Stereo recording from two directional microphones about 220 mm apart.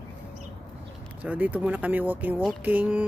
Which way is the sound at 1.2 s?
5° right (ahead or behind).